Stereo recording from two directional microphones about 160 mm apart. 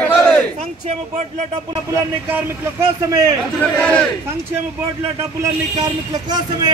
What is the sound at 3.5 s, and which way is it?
Speech, 5° left (ahead or behind).